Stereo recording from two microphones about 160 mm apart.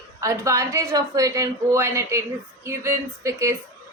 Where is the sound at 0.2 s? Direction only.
20° right (ahead or behind).